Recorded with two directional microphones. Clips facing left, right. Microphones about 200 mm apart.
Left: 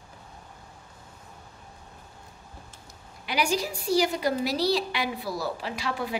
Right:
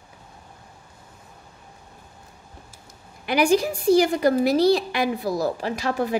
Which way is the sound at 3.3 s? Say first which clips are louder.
Right 8 dB; 55° right (ahead or behind).